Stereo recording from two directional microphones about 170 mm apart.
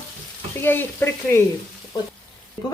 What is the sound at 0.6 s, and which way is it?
Speech, 10° left (ahead or behind).